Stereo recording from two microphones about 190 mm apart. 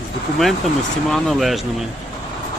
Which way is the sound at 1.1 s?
Centre (ahead or behind).